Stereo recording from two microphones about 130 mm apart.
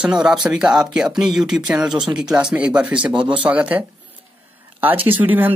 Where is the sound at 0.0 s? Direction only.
5° right (ahead or behind).